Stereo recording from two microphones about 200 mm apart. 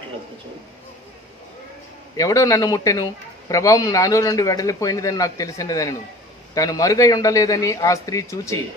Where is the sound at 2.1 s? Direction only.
15° left (ahead or behind).